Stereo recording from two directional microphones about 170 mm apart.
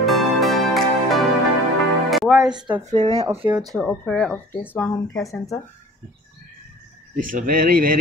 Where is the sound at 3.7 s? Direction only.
5° left (ahead or behind).